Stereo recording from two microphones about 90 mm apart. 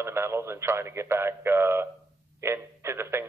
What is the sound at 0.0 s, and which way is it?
Speech, 30° right (ahead or behind).